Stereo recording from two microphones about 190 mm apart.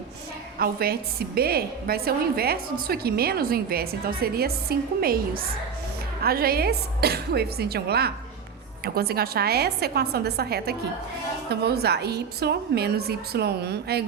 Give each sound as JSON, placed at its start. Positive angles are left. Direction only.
{"t": 0.6, "sound": "a woman's voice", "side_deg": -50}